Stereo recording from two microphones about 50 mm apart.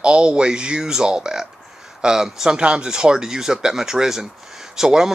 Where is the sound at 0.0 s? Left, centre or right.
Right.